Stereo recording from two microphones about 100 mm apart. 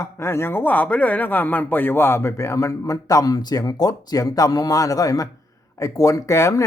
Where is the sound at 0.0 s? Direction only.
25° left (ahead or behind).